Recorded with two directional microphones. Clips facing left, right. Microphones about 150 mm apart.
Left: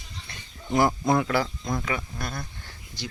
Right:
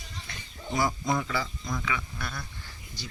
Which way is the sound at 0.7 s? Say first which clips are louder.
Left 6 dB; 55° left (ahead or behind).